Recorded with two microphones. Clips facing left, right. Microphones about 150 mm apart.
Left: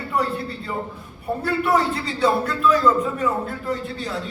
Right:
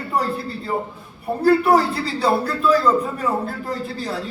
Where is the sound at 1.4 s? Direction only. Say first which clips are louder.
Right 6 dB; 35° right (ahead or behind).